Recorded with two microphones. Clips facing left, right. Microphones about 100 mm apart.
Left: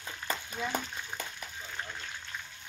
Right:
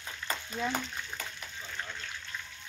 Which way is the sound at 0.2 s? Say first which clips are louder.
Left 1 dB; 35° left (ahead or behind).